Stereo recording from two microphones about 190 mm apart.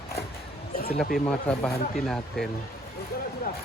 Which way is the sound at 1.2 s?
10° left (ahead or behind).